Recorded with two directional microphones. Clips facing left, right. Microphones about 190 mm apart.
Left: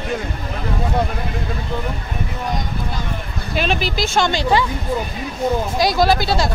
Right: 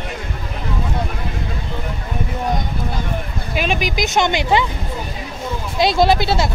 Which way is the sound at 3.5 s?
10° right (ahead or behind).